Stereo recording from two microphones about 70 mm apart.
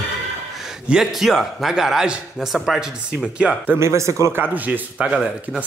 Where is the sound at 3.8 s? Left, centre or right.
Right.